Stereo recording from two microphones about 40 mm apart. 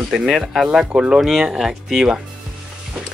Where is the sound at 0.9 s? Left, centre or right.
Right.